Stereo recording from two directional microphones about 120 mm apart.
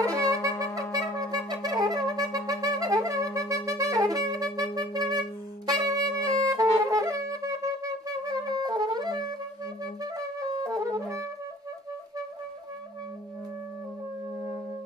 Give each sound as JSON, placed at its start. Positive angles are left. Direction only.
{"t": 0.0, "sound": "wind instrument", "side_deg": -25}
{"t": 0.5, "sound": "wind instrument", "side_deg": 10}
{"t": 0.9, "sound": "wind instrument", "side_deg": -30}